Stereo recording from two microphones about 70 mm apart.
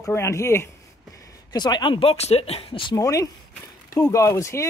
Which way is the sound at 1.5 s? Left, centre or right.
Left.